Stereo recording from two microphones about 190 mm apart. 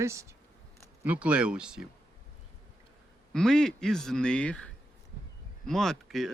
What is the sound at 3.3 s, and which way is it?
Speech, 5° left (ahead or behind).